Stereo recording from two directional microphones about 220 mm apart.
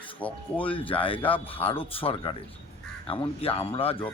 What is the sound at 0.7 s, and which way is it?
A man's voice, 25° left (ahead or behind).